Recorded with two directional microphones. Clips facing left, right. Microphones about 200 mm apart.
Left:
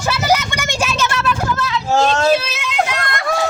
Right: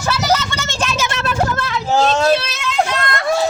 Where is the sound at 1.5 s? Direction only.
50° right (ahead or behind).